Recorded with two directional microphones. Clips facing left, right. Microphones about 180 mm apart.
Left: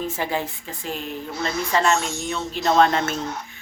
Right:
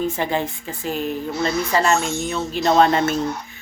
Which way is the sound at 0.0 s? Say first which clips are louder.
Right 4 dB; 5° left (ahead or behind).